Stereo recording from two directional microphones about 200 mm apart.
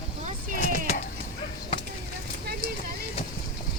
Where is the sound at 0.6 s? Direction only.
35° left (ahead or behind).